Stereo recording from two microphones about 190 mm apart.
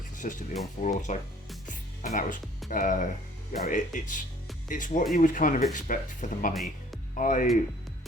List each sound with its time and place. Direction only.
0.2 s speech: 40° left (ahead or behind)
1.6 s music: 45° left (ahead or behind)
2.6 s speech: 45° left (ahead or behind)
6.5 s speech: centre (ahead or behind)
7.2 s speech: 45° left (ahead or behind)